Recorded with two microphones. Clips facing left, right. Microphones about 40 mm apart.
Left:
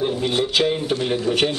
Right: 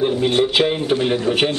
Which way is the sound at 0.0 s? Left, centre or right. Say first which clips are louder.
Right 4 dB; centre.